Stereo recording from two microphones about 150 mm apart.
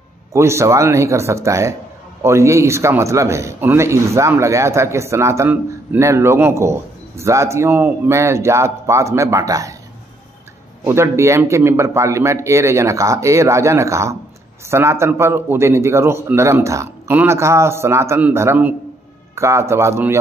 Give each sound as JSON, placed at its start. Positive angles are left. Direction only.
{"t": 0.3, "sound": "a man's voice", "side_deg": -20}
{"t": 10.9, "sound": "a man's voice", "side_deg": -20}